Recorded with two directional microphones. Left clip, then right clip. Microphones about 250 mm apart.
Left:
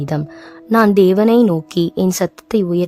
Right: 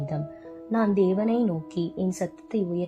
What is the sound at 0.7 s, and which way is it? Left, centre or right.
A woman's voice, left.